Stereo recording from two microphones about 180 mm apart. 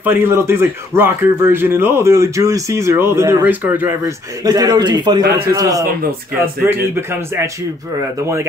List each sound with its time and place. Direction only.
0.0 s a man's voice: 10° right (ahead or behind)